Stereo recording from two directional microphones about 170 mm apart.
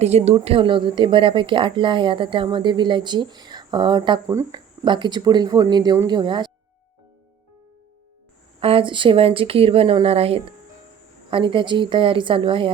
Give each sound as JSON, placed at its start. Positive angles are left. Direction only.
{"t": 0.0, "sound": "a woman's voice", "side_deg": -40}
{"t": 8.6, "sound": "a woman's voice", "side_deg": -30}